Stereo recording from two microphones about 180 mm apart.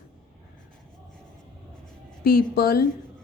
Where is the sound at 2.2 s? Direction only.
60° left (ahead or behind).